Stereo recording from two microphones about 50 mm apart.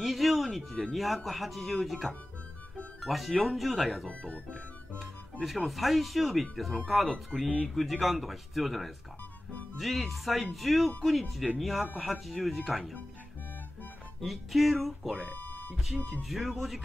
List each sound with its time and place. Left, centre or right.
0.0 s music: centre
0.9 s speech: centre
4.1 s speech: left
4.9 s music: centre
5.7 s speech: centre
14.2 s speech: centre
15.1 s guitar: left
16.1 s speech: centre